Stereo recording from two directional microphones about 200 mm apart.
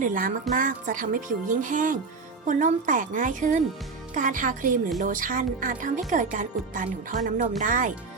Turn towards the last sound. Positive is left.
turn(degrees=-40)  # may be behind; listen again after turning